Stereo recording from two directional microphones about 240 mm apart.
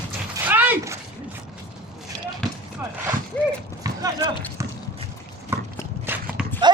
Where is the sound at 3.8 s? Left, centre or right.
Centre.